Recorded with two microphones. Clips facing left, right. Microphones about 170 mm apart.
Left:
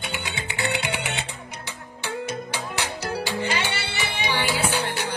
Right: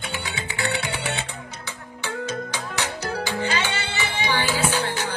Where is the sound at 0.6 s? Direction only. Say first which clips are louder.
Left 1 dB; 20° left (ahead or behind).